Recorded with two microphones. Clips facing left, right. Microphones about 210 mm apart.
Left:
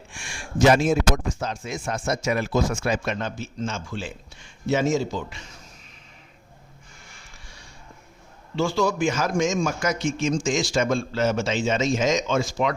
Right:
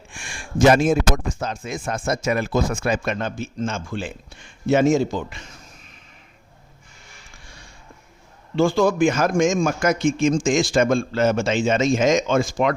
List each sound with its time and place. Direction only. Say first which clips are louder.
0.1 s speech: right 2 dB; 55° right (ahead or behind)
8.5 s speech: right 5 dB; 55° right (ahead or behind)